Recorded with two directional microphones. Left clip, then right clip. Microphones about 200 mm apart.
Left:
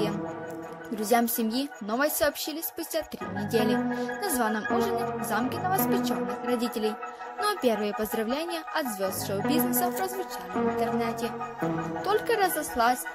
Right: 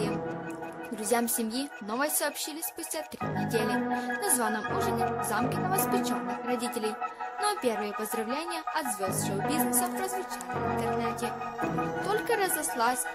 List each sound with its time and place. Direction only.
1.0 s speech: 15° left (ahead or behind)
3.5 s speech: 15° left (ahead or behind)